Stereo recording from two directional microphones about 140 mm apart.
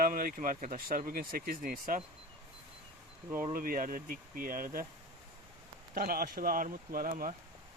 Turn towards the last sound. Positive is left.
turn(degrees=-85)